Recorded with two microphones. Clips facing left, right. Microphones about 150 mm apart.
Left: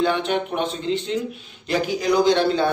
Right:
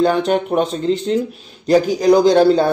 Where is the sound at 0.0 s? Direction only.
40° right (ahead or behind).